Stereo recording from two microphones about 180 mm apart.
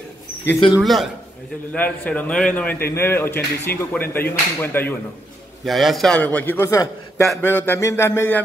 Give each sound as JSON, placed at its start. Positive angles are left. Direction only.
{"t": 0.8, "sound": "a man's voice", "side_deg": 0}
{"t": 5.7, "sound": "speech", "side_deg": 0}